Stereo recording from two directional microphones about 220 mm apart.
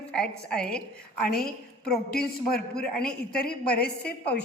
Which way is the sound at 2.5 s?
5° left (ahead or behind).